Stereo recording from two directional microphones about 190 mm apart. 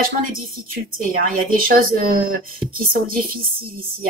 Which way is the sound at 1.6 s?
50° right (ahead or behind).